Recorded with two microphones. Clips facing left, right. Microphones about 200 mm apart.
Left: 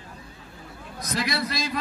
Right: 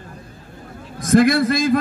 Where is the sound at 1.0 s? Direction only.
50° right (ahead or behind).